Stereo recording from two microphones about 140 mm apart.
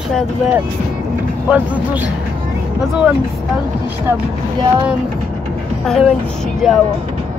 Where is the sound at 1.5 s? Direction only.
10° right (ahead or behind).